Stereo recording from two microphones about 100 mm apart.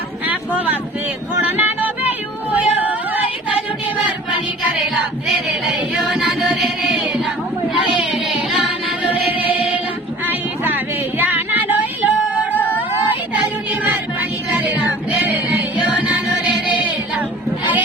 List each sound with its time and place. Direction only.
0.3 s a sound: 15° right (ahead or behind)
1.4 s yodeling: 15° right (ahead or behind)
5.6 s music: 5° right (ahead or behind)
9.3 s music: 15° right (ahead or behind)
10.2 s a sound: 20° right (ahead or behind)
11.2 s music: 20° right (ahead or behind)